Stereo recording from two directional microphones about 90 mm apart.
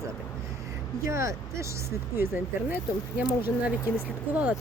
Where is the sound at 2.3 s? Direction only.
20° right (ahead or behind).